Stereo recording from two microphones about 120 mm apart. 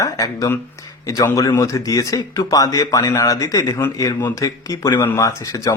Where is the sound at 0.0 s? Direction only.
30° left (ahead or behind).